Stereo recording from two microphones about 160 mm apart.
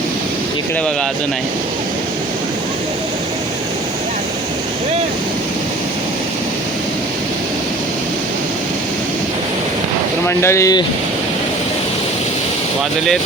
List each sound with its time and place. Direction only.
10.2 s speech: 15° left (ahead or behind)